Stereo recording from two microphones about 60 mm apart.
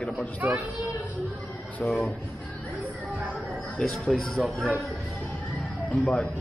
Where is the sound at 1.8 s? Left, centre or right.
Left.